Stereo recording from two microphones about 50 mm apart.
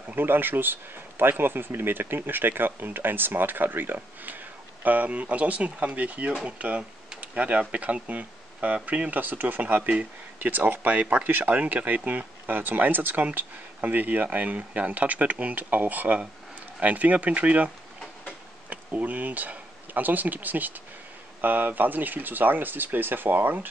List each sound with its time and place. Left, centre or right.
0.1 s speech: right
9.1 s speech: right
18.7 s speech: right